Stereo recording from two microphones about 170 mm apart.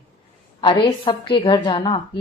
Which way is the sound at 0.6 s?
30° left (ahead or behind).